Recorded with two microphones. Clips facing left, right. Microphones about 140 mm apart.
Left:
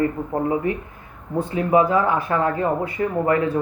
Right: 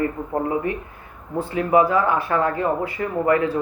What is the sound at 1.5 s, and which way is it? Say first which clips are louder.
Speech: even; 25° left (ahead or behind).